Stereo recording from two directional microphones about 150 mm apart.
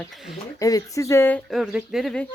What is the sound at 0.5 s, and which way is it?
Speech, 20° left (ahead or behind).